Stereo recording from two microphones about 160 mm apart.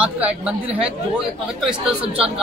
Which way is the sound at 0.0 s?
10° right (ahead or behind).